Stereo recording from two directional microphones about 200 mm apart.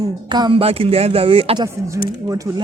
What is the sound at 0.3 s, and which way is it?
Speech, 20° right (ahead or behind).